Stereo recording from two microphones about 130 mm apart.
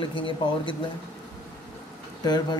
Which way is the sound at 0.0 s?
40° left (ahead or behind).